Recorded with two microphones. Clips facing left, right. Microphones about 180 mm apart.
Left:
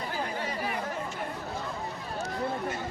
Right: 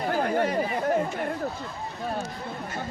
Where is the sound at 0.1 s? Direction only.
55° right (ahead or behind).